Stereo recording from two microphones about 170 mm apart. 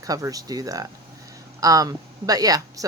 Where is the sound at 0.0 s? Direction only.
20° right (ahead or behind).